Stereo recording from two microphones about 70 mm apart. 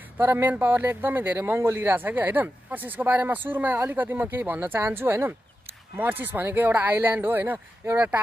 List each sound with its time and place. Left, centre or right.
0.2 s speech: right